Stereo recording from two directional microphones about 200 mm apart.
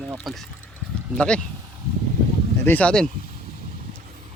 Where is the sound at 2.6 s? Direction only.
5° left (ahead or behind).